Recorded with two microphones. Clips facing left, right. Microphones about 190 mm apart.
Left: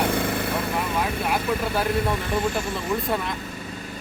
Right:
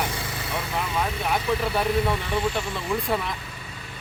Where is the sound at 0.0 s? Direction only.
60° left (ahead or behind).